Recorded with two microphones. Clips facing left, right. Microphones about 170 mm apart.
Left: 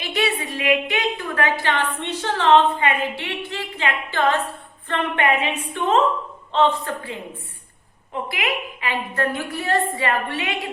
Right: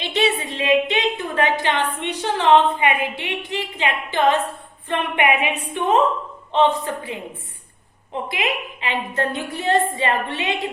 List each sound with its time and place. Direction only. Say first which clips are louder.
0.0 s a woman's voice: right 3 dB; 25° right (ahead or behind)
4.9 s a sound: right 1 dB; 15° right (ahead or behind)
8.1 s a woman's voice: right 1 dB; 20° right (ahead or behind)